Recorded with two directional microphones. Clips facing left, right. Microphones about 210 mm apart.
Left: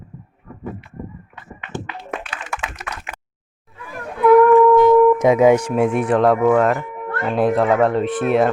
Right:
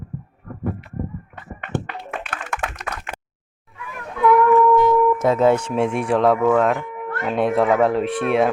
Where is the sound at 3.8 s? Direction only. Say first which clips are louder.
Left 3 dB; 35° left (ahead or behind).